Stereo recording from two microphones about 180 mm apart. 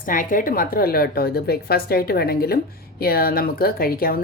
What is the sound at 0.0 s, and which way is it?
A woman's voice, 50° left (ahead or behind).